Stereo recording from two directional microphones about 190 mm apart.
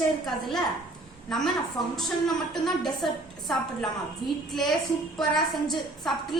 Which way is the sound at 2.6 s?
Centre (ahead or behind).